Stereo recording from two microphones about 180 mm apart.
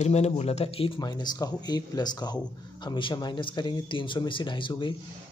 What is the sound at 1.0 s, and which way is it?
Speech, 25° left (ahead or behind).